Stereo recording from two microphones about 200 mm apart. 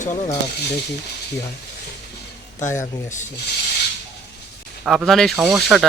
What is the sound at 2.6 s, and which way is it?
Speech, 40° left (ahead or behind).